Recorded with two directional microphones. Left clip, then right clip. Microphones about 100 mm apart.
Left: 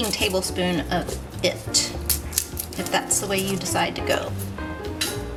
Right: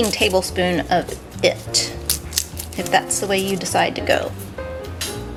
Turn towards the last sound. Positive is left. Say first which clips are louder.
# right 5 dB
turn(degrees=-20)  # may be behind; listen again after turning